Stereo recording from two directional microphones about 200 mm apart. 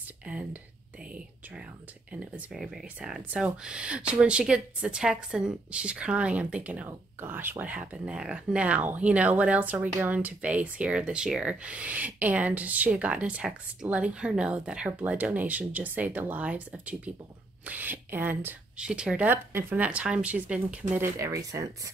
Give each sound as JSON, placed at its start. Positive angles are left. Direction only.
{"t": 0.2, "sound": "speech", "side_deg": -5}
{"t": 2.1, "sound": "speech", "side_deg": -5}